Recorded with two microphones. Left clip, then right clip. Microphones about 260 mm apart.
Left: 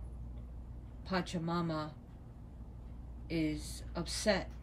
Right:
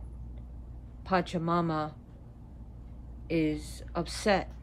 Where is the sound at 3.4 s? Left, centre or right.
Centre.